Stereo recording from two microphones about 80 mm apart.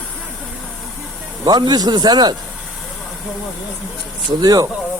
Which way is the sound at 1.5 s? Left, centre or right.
Right.